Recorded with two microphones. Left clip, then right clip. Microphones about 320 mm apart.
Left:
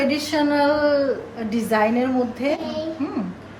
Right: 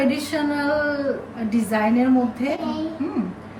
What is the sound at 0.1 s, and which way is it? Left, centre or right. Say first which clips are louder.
Speech: left 3 dB; centre.